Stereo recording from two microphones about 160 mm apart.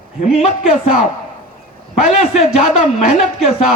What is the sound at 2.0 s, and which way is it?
A man's voice, 40° left (ahead or behind).